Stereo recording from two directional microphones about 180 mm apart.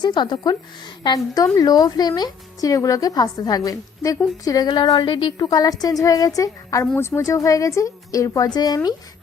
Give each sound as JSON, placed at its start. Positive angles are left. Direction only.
{"t": 0.0, "sound": "a woman's voice", "side_deg": 25}